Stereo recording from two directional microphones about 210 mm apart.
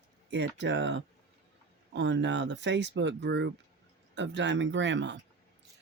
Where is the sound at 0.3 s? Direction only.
55° right (ahead or behind).